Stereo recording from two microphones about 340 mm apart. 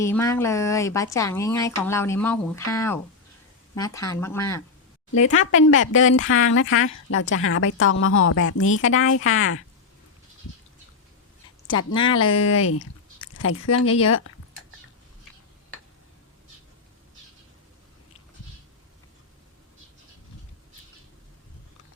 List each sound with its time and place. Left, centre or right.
0.0 s speech: centre
5.5 s speech: left
12.2 s speech: left